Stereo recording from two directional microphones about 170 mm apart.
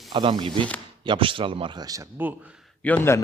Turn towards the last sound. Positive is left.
turn(degrees=10)  # may be behind; listen again after turning